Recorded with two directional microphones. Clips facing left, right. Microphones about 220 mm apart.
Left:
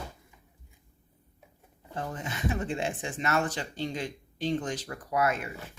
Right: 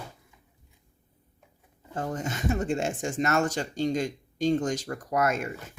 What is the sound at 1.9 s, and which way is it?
Speech, 45° right (ahead or behind).